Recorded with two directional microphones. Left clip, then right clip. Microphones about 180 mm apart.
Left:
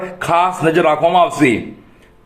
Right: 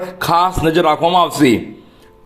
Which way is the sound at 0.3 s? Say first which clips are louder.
Even; 45° right (ahead or behind).